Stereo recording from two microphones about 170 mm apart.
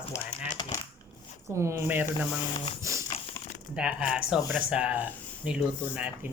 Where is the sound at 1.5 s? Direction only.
15° right (ahead or behind).